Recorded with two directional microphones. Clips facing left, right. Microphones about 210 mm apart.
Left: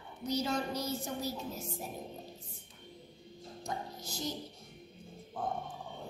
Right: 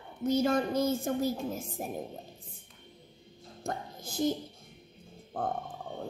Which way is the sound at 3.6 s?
55° right (ahead or behind).